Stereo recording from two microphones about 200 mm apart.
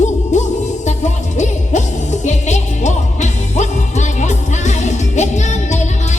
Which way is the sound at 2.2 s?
35° left (ahead or behind).